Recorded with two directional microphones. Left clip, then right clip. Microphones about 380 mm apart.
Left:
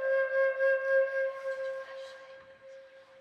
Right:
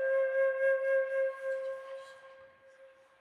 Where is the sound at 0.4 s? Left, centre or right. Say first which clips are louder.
Left 2 dB; centre.